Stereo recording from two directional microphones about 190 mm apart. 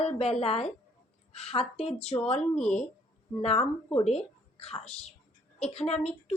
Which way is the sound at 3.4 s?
35° left (ahead or behind).